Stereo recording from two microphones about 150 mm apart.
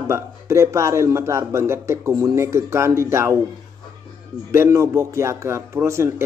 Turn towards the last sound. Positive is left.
turn(degrees=-20)  # may be behind; listen again after turning